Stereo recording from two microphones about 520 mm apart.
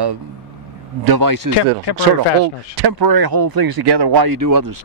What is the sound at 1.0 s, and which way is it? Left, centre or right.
Speech, right.